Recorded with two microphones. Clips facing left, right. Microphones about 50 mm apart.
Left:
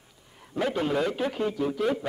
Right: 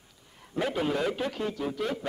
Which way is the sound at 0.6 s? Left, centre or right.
Centre.